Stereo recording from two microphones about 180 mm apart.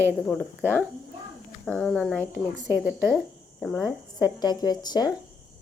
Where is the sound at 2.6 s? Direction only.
15° right (ahead or behind).